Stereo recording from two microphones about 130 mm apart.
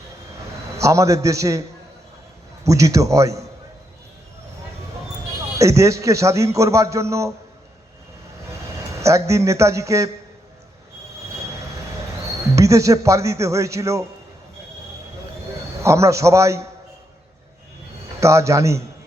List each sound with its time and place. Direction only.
0.8 s a man's voice: 25° right (ahead or behind)
2.6 s a man's voice: 25° right (ahead or behind)
5.5 s a man's voice: 25° right (ahead or behind)
8.9 s a man's voice: 25° right (ahead or behind)
12.5 s a man's voice: 25° right (ahead or behind)
15.8 s a man's voice: 20° right (ahead or behind)
18.2 s a man's voice: 20° right (ahead or behind)